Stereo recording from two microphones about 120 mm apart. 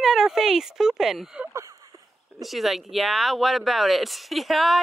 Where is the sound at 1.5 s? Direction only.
25° right (ahead or behind).